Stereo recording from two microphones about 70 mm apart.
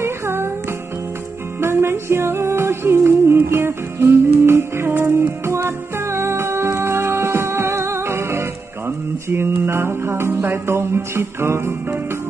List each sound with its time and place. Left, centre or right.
0.0 s music: right
1.6 s music: right